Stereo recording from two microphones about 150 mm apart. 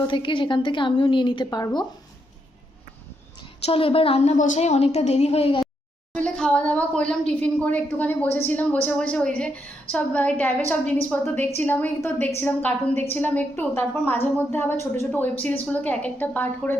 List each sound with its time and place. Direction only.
0.1 s a woman's voice: 35° left (ahead or behind)
3.6 s a woman's voice: 40° left (ahead or behind)
4.4 s a woman's voice: 55° left (ahead or behind)
6.1 s a woman's voice: 5° left (ahead or behind)